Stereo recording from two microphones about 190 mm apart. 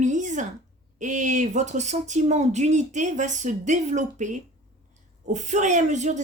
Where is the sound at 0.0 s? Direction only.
40° right (ahead or behind).